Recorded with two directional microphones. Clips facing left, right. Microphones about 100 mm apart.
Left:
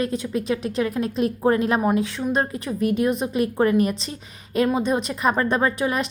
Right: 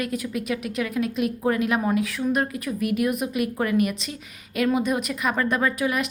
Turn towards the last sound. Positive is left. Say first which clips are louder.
# left 2 dB
turn(degrees=30)  # may be behind; listen again after turning